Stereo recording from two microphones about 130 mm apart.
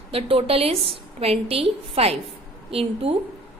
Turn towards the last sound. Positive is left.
turn(degrees=-50)  # may be behind; listen again after turning